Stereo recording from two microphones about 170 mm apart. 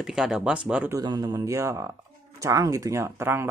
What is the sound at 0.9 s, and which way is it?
Speech, 25° right (ahead or behind).